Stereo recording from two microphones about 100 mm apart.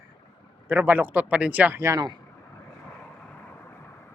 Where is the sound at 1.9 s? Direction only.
50° right (ahead or behind).